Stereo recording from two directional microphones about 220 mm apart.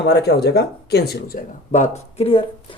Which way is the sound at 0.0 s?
50° left (ahead or behind).